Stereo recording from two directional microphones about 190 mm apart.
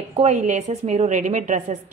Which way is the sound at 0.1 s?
35° right (ahead or behind).